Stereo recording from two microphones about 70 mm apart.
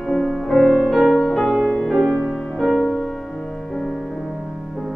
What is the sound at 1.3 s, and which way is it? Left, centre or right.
Music, centre.